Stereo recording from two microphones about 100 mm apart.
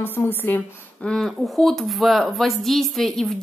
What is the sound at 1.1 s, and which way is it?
Speech, 5° left (ahead or behind).